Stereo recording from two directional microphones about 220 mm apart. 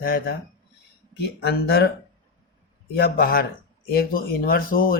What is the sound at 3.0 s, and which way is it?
Speech, 45° left (ahead or behind).